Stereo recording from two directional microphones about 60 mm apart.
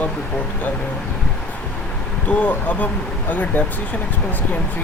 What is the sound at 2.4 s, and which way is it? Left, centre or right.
Speech, left.